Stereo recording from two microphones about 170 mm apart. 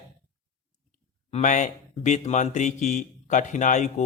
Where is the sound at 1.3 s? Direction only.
45° left (ahead or behind).